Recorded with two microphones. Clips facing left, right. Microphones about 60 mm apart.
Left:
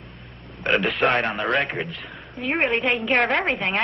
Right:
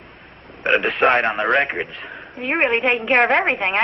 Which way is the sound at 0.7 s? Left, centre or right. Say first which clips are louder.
Right 4 dB; right.